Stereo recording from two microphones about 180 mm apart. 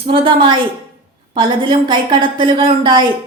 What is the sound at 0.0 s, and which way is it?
A woman's voice, 30° right (ahead or behind).